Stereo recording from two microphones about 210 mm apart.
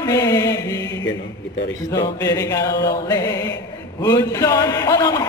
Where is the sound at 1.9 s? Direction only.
15° left (ahead or behind).